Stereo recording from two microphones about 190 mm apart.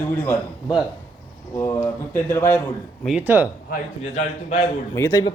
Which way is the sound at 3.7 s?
40° left (ahead or behind).